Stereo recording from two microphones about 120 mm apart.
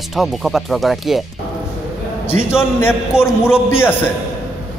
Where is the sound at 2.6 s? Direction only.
20° left (ahead or behind).